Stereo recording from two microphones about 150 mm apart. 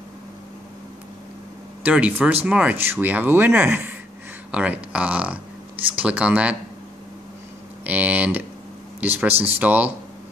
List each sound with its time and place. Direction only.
1.8 s speech: 10° right (ahead or behind)
7.8 s speech: 10° right (ahead or behind)
9.3 s speech: 40° right (ahead or behind)
9.6 s speech: 10° right (ahead or behind)